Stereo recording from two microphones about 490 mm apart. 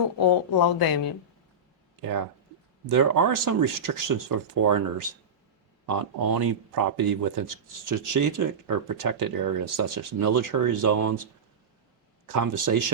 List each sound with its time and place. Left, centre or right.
0.2 s speech: left
2.8 s speech: right